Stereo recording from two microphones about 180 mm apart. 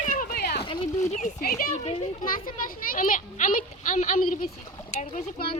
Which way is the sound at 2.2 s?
50° left (ahead or behind).